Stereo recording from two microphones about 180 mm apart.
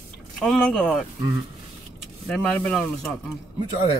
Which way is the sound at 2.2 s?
5° left (ahead or behind).